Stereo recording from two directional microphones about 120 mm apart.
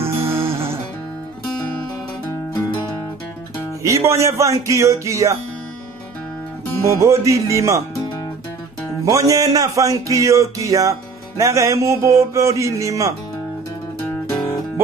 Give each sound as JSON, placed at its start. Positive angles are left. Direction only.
{"t": 0.3, "sound": "music", "side_deg": -20}
{"t": 2.5, "sound": "music", "side_deg": 35}
{"t": 3.8, "sound": "speech", "side_deg": -25}
{"t": 6.9, "sound": "speech", "side_deg": -25}
{"t": 9.0, "sound": "speech", "side_deg": -30}